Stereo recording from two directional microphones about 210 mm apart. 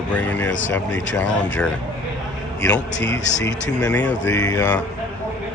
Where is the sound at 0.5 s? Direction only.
60° left (ahead or behind).